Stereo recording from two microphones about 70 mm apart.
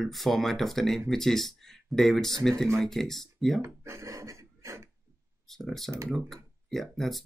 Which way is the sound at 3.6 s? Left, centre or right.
Right.